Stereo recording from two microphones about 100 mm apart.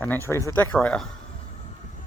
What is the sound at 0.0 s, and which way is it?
Speech, 20° left (ahead or behind).